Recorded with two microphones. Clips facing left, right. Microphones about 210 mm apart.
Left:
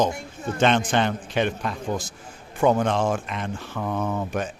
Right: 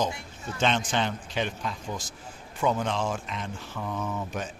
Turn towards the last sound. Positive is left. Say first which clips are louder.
# left 6 dB
turn(degrees=60)  # may be behind; listen again after turning